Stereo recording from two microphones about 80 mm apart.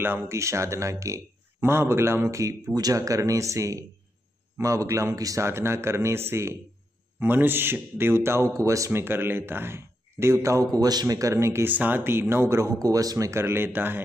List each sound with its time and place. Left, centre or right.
0.0 s a man's voice: right
11.7 s a man's voice: right
13.3 s speech: right